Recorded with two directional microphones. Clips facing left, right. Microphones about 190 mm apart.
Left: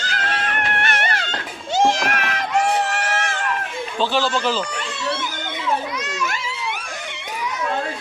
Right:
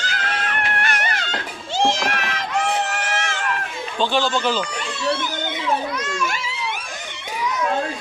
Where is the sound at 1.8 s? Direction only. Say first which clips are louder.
Left 2 dB; 45° left (ahead or behind).